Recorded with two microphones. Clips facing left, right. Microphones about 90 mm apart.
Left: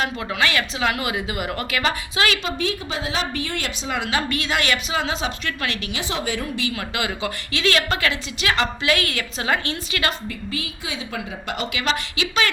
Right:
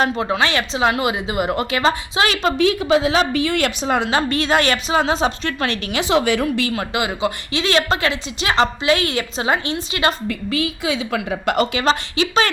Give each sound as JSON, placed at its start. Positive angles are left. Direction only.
{"t": 0.0, "sound": "a woman's voice", "side_deg": -30}
{"t": 2.6, "sound": "a woman's voice", "side_deg": -90}
{"t": 3.8, "sound": "a woman's voice", "side_deg": -35}
{"t": 5.9, "sound": "a woman's voice", "side_deg": -80}
{"t": 6.7, "sound": "a woman's voice", "side_deg": -20}
{"t": 10.2, "sound": "a woman's voice", "side_deg": -90}
{"t": 11.7, "sound": "a woman's voice", "side_deg": -35}